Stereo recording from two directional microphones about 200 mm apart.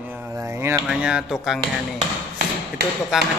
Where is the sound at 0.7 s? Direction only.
5° right (ahead or behind).